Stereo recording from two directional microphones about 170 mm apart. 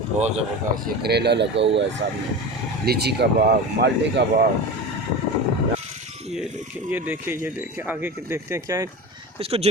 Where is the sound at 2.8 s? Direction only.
70° right (ahead or behind).